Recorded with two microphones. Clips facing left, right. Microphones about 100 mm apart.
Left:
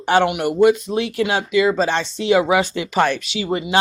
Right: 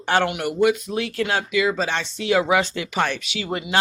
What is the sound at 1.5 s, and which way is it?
Speech, 35° left (ahead or behind).